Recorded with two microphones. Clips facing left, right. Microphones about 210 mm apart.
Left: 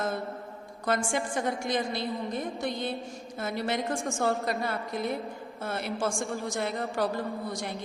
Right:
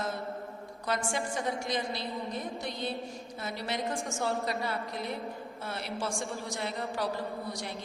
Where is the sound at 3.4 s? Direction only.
50° left (ahead or behind).